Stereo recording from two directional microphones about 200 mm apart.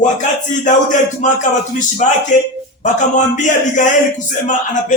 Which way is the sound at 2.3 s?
40° left (ahead or behind).